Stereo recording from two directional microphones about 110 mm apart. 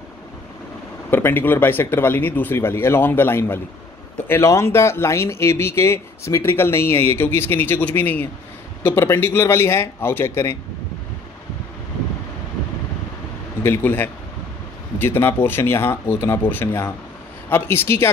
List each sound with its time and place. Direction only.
1.1 s speech: 15° left (ahead or behind)
13.6 s speech: 20° left (ahead or behind)